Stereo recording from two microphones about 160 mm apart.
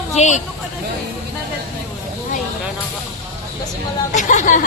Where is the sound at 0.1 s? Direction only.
45° left (ahead or behind).